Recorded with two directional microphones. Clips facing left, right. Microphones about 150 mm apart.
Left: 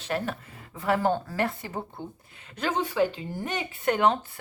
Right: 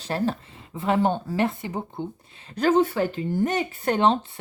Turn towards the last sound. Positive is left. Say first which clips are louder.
# right 2 dB
turn(degrees=-30)  # may be behind; listen again after turning